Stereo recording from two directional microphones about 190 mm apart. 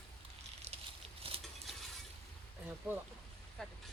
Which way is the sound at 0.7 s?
35° right (ahead or behind).